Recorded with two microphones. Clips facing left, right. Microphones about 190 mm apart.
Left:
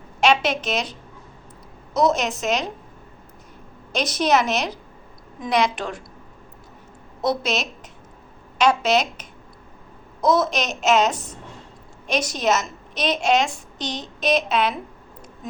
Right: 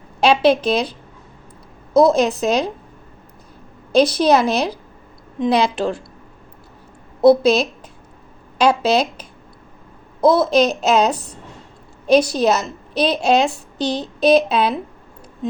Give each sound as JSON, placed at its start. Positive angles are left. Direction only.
{"t": 0.2, "sound": "a woman's voice", "side_deg": -35}
{"t": 3.9, "sound": "a woman's voice", "side_deg": -30}
{"t": 7.2, "sound": "a woman's voice", "side_deg": -35}